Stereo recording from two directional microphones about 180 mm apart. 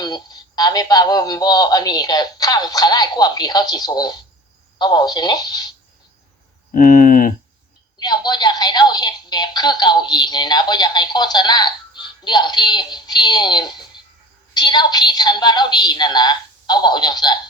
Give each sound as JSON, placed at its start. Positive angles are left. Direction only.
{"t": 0.0, "sound": "a woman's voice", "side_deg": 20}
{"t": 6.7, "sound": "speech", "side_deg": 50}
{"t": 7.9, "sound": "a woman's voice", "side_deg": 25}